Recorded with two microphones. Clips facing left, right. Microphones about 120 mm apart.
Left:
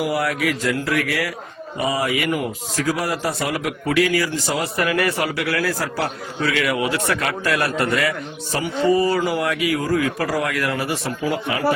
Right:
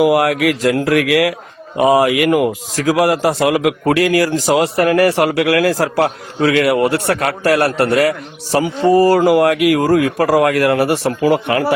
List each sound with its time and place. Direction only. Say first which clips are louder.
0.1 s a man's voice: right 8 dB; 85° right
4.9 s speech: right 8 dB; 70° right (ahead or behind); by 5.9 s 90° right
6.0 s a man's voice: right 8 dB; 55° right (ahead or behind)
8.9 s speech: right 9 dB; 75° right (ahead or behind)